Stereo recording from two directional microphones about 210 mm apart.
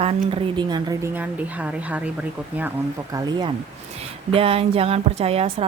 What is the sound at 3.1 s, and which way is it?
Speech, 20° right (ahead or behind).